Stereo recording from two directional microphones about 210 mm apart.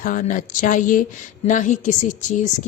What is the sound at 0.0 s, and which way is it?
Speech, 40° left (ahead or behind).